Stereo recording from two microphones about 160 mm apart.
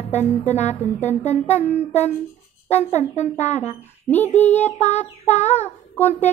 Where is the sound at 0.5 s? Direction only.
45° left (ahead or behind).